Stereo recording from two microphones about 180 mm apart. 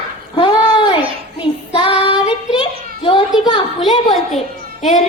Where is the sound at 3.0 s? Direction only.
25° left (ahead or behind).